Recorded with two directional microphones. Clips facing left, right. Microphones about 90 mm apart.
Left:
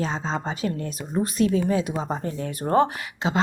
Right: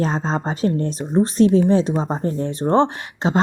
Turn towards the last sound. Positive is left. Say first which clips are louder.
# right 5 dB
turn(degrees=-40)  # may be behind; listen again after turning